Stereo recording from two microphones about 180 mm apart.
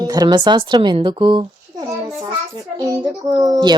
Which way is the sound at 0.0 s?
20° right (ahead or behind).